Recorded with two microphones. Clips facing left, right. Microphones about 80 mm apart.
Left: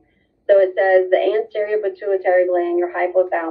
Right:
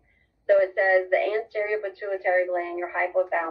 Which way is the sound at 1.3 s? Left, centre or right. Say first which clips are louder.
Left 7 dB; centre.